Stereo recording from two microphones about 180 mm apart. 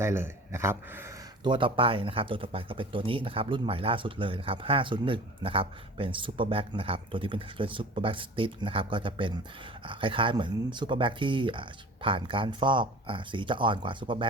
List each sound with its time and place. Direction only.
0.0 s speech: 15° right (ahead or behind)
1.5 s speech: 30° right (ahead or behind)